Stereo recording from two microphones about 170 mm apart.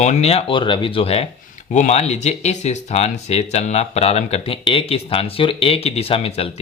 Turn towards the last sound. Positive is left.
turn(degrees=35)  # may be behind; listen again after turning